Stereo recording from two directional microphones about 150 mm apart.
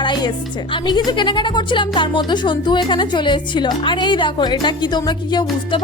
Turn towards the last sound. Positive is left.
turn(degrees=30)  # may be behind; listen again after turning